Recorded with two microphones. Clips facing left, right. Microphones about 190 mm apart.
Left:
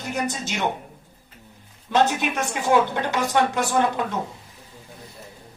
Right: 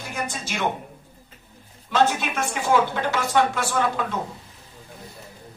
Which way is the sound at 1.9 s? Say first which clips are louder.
Left 1 dB; 20° left (ahead or behind).